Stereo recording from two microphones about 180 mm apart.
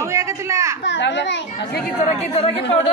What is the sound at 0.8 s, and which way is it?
Speech, 80° left.